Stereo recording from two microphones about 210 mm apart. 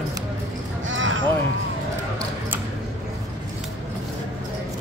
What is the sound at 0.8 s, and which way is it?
Speech, 65° right (ahead or behind).